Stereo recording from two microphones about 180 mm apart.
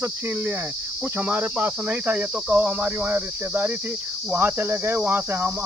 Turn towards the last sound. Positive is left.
turn(degrees=-10)  # may be behind; listen again after turning